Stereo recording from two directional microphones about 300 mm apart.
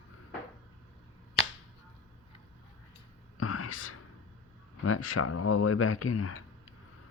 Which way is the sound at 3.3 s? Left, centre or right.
Left.